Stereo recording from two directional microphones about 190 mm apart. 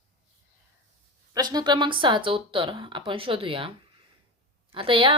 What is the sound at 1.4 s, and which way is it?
Speech, 20° right (ahead or behind).